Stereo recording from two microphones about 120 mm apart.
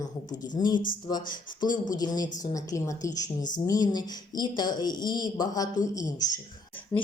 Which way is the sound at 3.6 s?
30° left (ahead or behind).